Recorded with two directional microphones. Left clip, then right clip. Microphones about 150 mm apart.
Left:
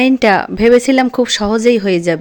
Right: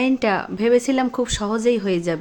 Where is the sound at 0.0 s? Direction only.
40° left (ahead or behind).